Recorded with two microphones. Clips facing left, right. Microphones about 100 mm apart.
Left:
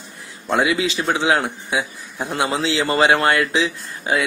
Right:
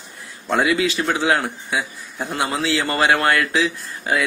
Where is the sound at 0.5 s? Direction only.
20° left (ahead or behind).